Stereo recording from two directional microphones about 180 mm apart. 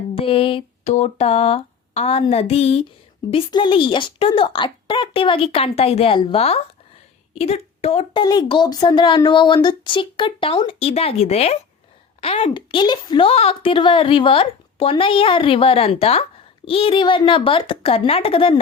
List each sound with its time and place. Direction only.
0.2 s a woman's voice: 30° left (ahead or behind)
8.2 s speech: 25° left (ahead or behind)